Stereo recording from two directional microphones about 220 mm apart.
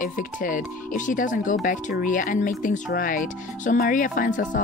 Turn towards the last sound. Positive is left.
turn(degrees=40)  # may be behind; listen again after turning